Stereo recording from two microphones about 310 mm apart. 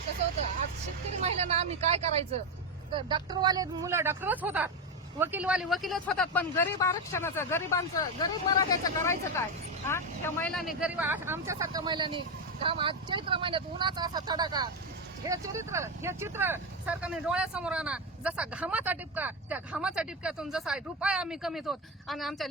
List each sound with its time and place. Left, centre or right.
1.2 s speech: right; by 22.4 s centre